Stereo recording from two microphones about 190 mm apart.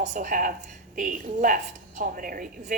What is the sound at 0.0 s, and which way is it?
A woman's voice, 40° right (ahead or behind).